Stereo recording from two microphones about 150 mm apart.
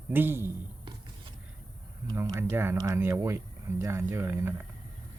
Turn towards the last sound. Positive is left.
turn(degrees=-15)  # may be behind; listen again after turning